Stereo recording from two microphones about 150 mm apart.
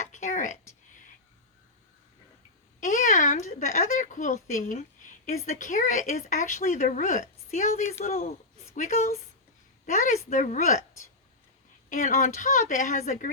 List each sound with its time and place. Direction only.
0.0 s a sound: 55° left (ahead or behind)
2.8 s a woman's voice: 55° left (ahead or behind)
11.9 s a woman's voice: 60° left (ahead or behind)